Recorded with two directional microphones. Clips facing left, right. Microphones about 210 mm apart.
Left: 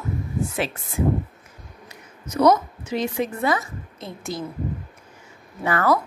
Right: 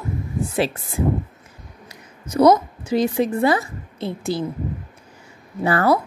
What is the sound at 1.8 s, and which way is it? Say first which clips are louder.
A woman's voice: right 1 dB; 30° right (ahead or behind).